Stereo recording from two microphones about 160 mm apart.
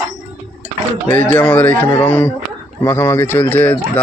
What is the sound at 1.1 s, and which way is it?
Speech, 10° left (ahead or behind).